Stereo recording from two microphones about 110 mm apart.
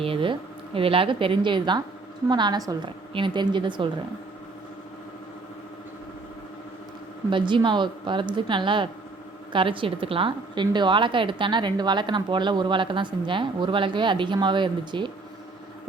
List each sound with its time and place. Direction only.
0.0 s a woman's voice: 55° right (ahead or behind); by 2.9 s 35° right (ahead or behind)
3.1 s a woman's voice: 50° right (ahead or behind)
7.3 s a woman's voice: 45° right (ahead or behind)